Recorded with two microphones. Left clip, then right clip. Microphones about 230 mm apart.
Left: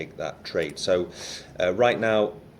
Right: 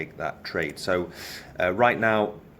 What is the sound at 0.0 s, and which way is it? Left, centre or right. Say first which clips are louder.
Speech: right 1 dB; right.